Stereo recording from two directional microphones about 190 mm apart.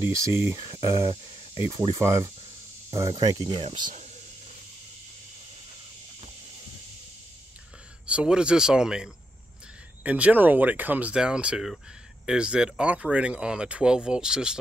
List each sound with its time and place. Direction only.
0.0 s speech: 15° right (ahead or behind); by 4.1 s 35° right (ahead or behind)
8.1 s speech: 5° right (ahead or behind)